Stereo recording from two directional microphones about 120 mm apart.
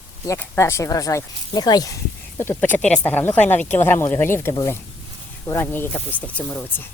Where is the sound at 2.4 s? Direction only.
15° left (ahead or behind).